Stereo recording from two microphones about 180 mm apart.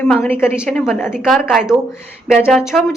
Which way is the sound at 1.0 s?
5° right (ahead or behind).